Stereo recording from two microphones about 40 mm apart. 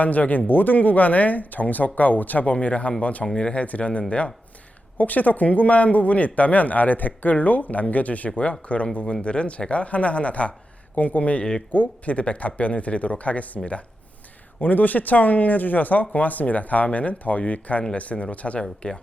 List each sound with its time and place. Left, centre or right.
0.0 s speech: left
14.6 s speech: left